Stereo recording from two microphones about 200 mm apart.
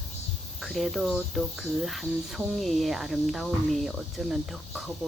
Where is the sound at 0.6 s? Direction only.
Centre (ahead or behind).